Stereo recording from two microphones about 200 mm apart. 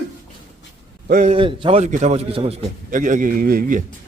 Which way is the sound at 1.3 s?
25° right (ahead or behind).